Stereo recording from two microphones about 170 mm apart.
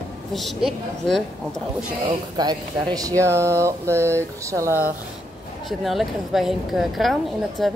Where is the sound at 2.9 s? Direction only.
20° right (ahead or behind).